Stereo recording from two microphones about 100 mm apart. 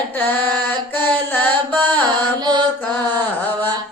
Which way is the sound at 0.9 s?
20° left (ahead or behind).